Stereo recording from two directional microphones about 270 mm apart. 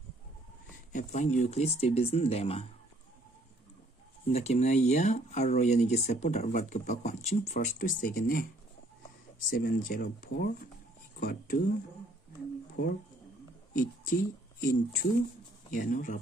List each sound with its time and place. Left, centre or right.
0.9 s speech: left
4.3 s speech: left
9.5 s speech: left
12.8 s speech: left
14.6 s speech: left